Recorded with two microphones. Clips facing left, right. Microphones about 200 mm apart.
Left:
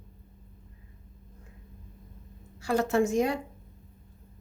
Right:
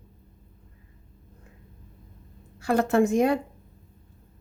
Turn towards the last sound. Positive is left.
turn(degrees=-55)  # may be behind; listen again after turning